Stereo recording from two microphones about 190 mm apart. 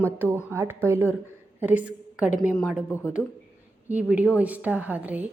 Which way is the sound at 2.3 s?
45° left (ahead or behind).